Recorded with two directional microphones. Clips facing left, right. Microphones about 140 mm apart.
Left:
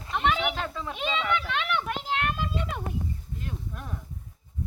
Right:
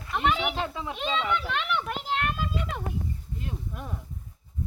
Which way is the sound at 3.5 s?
10° right (ahead or behind).